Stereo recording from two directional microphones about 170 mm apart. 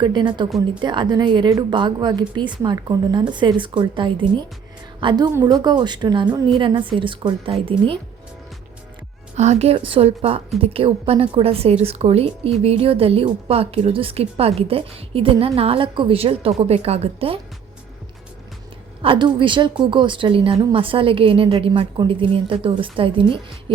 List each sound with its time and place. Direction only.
0.0 s a woman's voice: 25° right (ahead or behind)
9.3 s a woman's voice: 40° right (ahead or behind)
19.0 s a woman's voice: 30° right (ahead or behind)